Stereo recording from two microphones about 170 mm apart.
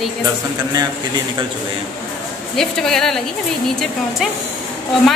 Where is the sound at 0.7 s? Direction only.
25° right (ahead or behind).